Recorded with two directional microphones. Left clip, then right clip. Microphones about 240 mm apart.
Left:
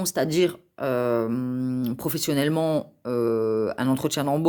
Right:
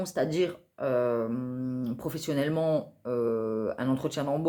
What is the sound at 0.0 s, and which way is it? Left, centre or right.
Speech, left.